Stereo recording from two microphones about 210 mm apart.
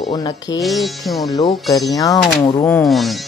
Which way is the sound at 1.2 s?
20° left (ahead or behind).